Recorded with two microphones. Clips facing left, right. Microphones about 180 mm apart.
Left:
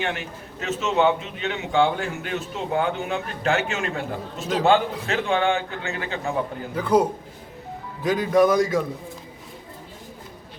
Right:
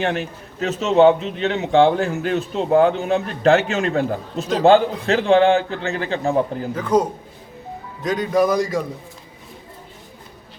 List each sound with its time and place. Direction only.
0.6 s a man's voice: 35° right (ahead or behind)
6.7 s a man's voice: 10° left (ahead or behind)